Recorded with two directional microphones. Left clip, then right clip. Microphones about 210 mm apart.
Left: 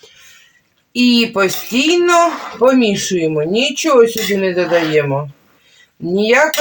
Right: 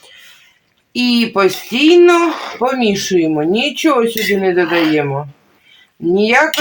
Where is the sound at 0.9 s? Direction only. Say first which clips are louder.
Left 1 dB; 45° right (ahead or behind).